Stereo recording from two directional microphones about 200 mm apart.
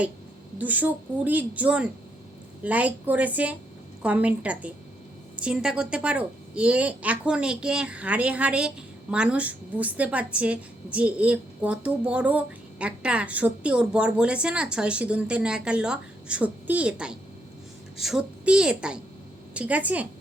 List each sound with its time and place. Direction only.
0.6 s a woman's voice: 10° right (ahead or behind)